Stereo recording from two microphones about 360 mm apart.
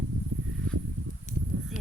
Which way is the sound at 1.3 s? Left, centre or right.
Centre.